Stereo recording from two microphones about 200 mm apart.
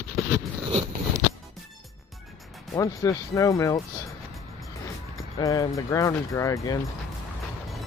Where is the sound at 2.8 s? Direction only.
15° left (ahead or behind).